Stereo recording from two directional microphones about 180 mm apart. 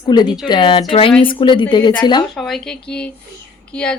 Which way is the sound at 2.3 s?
Centre (ahead or behind).